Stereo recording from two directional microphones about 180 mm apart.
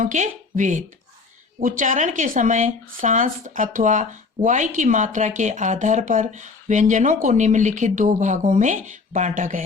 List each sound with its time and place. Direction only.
0.0 s speech: 45° right (ahead or behind)